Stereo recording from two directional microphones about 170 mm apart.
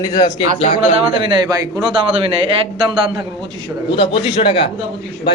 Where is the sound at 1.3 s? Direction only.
20° right (ahead or behind).